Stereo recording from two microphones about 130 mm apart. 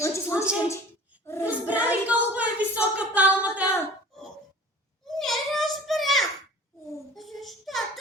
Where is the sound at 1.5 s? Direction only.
10° right (ahead or behind).